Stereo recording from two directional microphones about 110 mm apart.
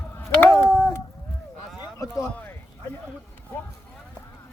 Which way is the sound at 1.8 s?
30° left (ahead or behind).